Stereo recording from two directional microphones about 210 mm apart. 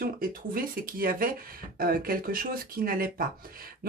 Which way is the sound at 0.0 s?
45° right (ahead or behind).